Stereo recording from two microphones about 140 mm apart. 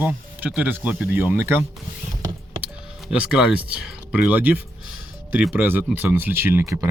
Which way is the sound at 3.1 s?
5° right (ahead or behind).